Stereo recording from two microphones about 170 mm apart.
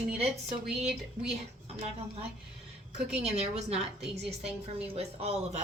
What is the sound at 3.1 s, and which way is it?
Speech, 40° right (ahead or behind).